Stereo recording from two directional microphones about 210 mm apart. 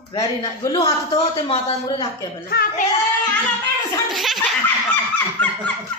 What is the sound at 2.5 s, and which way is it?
Speech, 50° left (ahead or behind).